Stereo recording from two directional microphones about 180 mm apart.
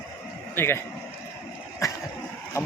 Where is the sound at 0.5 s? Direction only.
15° left (ahead or behind).